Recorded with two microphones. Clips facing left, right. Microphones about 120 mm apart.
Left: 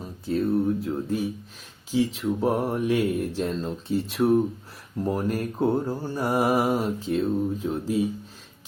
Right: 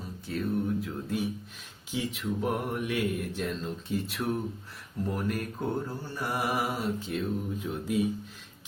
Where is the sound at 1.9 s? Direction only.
30° left (ahead or behind).